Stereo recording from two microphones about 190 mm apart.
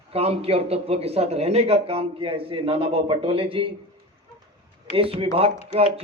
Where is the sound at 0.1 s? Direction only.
30° right (ahead or behind).